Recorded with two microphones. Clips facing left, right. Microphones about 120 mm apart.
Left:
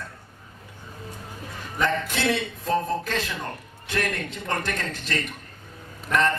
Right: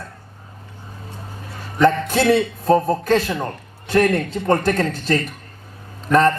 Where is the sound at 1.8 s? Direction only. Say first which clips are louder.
Right 9 dB; 35° right (ahead or behind).